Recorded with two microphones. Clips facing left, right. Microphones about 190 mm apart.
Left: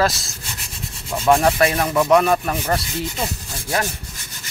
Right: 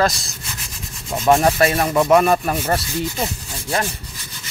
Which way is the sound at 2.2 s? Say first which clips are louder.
Right 1 dB; 10° right (ahead or behind).